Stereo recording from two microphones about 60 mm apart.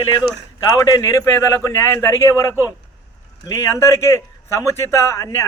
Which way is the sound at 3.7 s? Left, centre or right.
Left.